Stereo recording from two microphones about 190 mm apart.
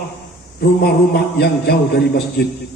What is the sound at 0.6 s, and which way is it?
A man's voice, 55° left (ahead or behind).